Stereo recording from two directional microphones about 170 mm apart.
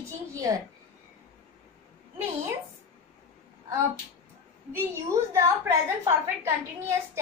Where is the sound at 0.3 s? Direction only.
20° right (ahead or behind).